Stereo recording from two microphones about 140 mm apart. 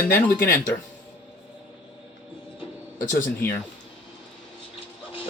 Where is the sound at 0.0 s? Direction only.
10° left (ahead or behind).